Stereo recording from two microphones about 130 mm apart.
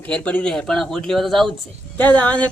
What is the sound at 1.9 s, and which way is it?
Speech, 10° left (ahead or behind).